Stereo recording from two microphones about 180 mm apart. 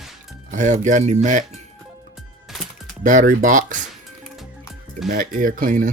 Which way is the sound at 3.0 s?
45° right (ahead or behind).